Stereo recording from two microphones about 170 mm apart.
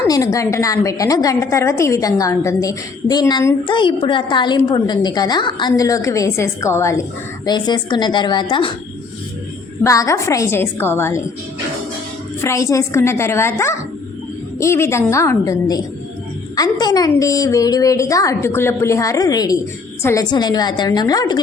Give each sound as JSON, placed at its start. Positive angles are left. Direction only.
{"t": 0.1, "sound": "a woman's voice", "side_deg": 20}
{"t": 9.8, "sound": "a woman's voice", "side_deg": 20}
{"t": 12.4, "sound": "a woman's voice", "side_deg": 15}